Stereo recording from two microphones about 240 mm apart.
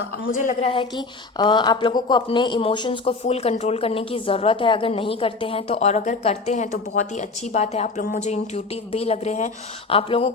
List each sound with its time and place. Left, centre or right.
0.4 s speech: left